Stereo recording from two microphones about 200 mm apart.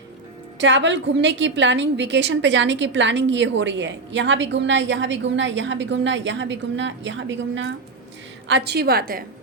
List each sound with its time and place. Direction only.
0.6 s a woman's voice: 65° right (ahead or behind); by 9.2 s 50° right (ahead or behind)